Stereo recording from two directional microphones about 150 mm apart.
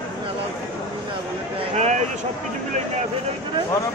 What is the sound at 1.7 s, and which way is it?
Speech, 50° right (ahead or behind).